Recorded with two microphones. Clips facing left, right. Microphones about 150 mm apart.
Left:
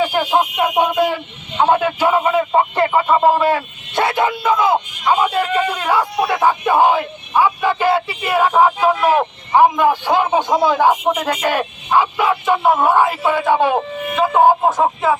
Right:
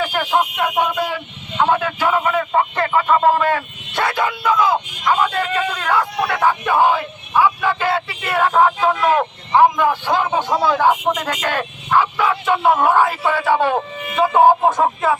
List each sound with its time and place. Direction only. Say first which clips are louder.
0.0 s a man's voice: left 3 dB; 20° left (ahead or behind)
4.0 s a sound: left 2 dB; 25° left (ahead or behind)
14.2 s speech: even; 5° left (ahead or behind)